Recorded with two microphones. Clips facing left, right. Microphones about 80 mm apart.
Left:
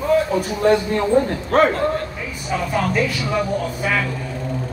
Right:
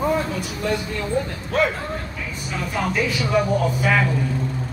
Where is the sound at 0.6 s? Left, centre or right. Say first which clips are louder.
Left 9 dB; left.